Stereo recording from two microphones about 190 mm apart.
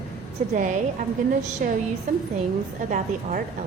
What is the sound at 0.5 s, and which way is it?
Speech, 45° right (ahead or behind).